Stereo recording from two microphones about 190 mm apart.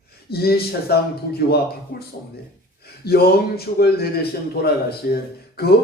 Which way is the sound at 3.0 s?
55° left (ahead or behind).